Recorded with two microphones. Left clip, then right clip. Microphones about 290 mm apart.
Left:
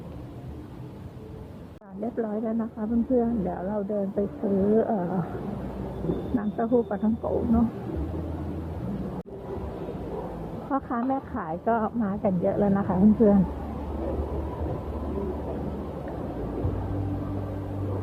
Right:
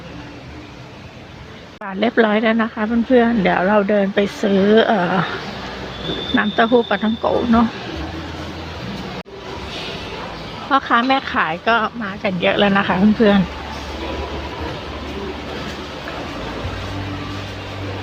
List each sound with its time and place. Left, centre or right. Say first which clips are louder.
1.8 s speech: right 15 dB; right
6.3 s speech: right 11 dB; right
10.7 s speech: right 13 dB; right